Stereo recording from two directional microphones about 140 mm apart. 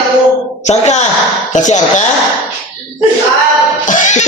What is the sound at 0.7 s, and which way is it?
Speech, 55° left (ahead or behind).